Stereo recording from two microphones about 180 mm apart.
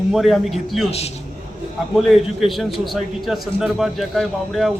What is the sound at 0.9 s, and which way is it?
Speech, 35° left (ahead or behind).